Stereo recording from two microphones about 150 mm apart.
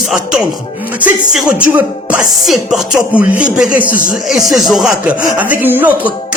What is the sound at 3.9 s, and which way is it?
Speech, 65° left (ahead or behind).